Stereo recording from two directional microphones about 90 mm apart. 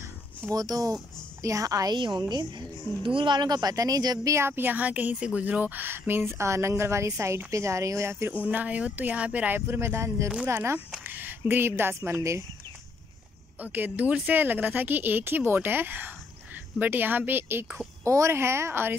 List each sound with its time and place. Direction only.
0.5 s a woman's voice: 40° right (ahead or behind)
2.0 s speech: 55° right (ahead or behind)
4.4 s speech: 25° right (ahead or behind)
8.5 s speech: 15° right (ahead or behind); by 12.4 s 35° right (ahead or behind)
13.6 s speech: 20° right (ahead or behind)